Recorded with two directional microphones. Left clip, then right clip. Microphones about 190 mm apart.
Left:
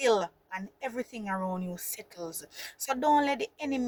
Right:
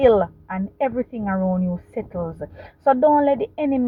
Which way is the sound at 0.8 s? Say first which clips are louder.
Right 11 dB; 40° left (ahead or behind).